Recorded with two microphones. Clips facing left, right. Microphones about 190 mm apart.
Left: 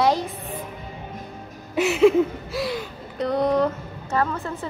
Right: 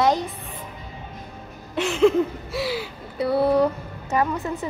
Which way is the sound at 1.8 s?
5° left (ahead or behind).